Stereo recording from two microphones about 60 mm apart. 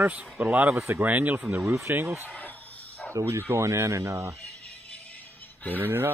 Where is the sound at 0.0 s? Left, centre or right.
Right.